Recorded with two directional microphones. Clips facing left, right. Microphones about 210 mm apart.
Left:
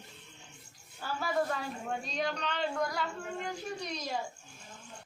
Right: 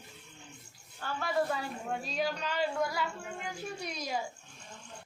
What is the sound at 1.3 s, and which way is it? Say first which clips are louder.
A woman's voice: right 2 dB; 5° right (ahead or behind).